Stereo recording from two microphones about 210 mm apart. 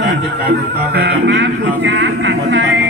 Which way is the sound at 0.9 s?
55° right (ahead or behind).